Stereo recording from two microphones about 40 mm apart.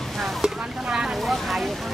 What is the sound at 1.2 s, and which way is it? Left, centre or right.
Vehicle, centre.